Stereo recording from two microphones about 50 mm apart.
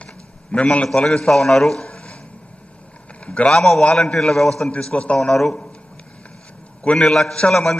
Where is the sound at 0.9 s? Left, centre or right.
Centre.